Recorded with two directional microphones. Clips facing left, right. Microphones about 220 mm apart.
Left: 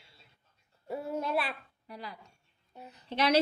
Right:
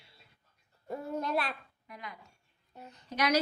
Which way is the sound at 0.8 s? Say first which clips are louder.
Left 1 dB; 5° left (ahead or behind).